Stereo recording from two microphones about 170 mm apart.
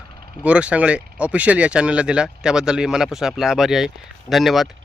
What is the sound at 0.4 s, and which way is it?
Speech, 5° right (ahead or behind).